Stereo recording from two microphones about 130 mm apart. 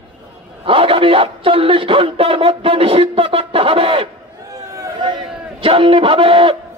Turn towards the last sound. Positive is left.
turn(degrees=-40)  # may be behind; listen again after turning